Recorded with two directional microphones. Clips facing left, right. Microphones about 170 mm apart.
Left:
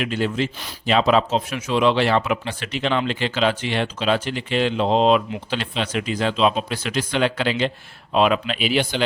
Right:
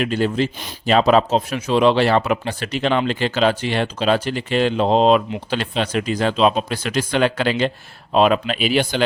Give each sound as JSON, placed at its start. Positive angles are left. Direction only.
{"t": 0.0, "sound": "speech", "side_deg": -40}